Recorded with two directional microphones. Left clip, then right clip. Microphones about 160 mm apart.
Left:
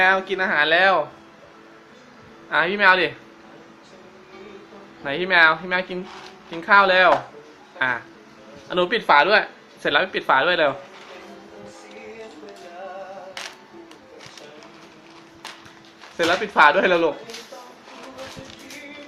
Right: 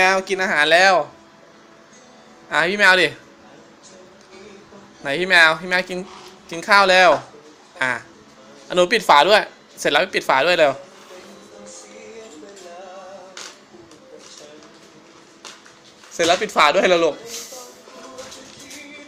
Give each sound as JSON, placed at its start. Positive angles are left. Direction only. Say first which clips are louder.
{"t": 0.0, "sound": "speech", "louder": "right 1 dB", "side_deg": -20}
{"t": 2.5, "sound": "speech", "louder": "right 2 dB", "side_deg": -25}
{"t": 5.0, "sound": "speech", "louder": "right 2 dB", "side_deg": -20}
{"t": 16.1, "sound": "speech", "louder": "right 1 dB", "side_deg": -10}